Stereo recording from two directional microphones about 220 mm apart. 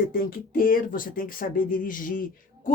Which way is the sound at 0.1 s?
40° left (ahead or behind).